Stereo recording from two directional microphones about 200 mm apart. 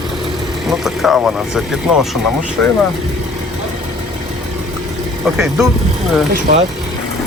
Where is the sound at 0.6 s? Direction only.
Centre (ahead or behind).